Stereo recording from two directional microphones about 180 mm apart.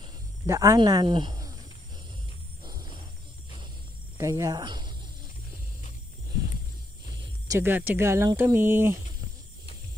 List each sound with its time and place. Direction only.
0.5 s speech: 20° right (ahead or behind)
2.6 s cricket: 25° right (ahead or behind)
4.2 s speech: 15° right (ahead or behind)
7.2 s speech: 15° right (ahead or behind)